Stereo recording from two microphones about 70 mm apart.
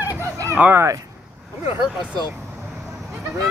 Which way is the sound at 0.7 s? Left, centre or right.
Right.